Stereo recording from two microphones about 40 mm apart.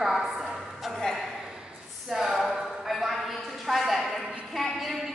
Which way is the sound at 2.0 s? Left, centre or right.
Centre.